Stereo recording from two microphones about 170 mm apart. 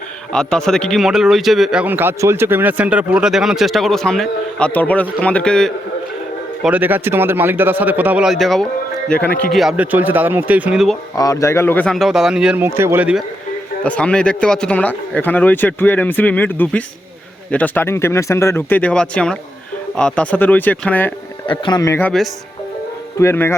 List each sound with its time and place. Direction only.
0.3 s a man's voice: 5° left (ahead or behind)
6.6 s speech: 10° right (ahead or behind)
11.1 s a man's voice: 20° left (ahead or behind); by 13.2 s 10° right (ahead or behind)
13.8 s a man's voice: 5° left (ahead or behind)
21.4 s speech: 30° left (ahead or behind)
23.1 s a man's voice: 15° left (ahead or behind)